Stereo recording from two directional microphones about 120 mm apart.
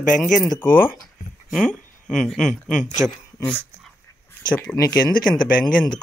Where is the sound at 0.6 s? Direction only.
15° left (ahead or behind).